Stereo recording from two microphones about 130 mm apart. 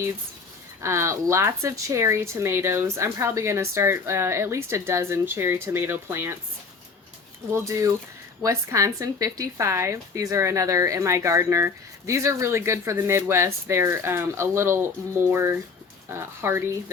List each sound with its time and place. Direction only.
0.8 s speech: 20° right (ahead or behind)
7.5 s speech: 25° right (ahead or behind)